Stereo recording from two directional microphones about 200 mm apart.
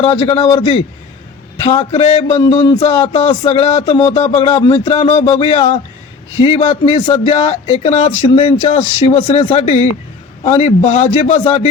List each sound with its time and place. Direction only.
0.0 s a man's voice: 30° left (ahead or behind)
1.8 s a man's voice: 35° left (ahead or behind)